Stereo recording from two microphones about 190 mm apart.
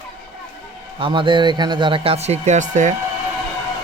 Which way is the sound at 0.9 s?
25° right (ahead or behind).